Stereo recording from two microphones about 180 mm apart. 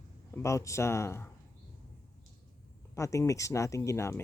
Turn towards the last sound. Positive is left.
turn(degrees=15)  # may be behind; listen again after turning